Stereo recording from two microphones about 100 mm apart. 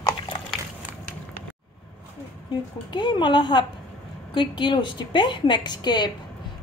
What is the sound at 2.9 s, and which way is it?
A woman's voice, 50° left (ahead or behind).